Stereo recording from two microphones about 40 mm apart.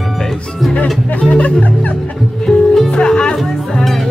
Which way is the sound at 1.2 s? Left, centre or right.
Left.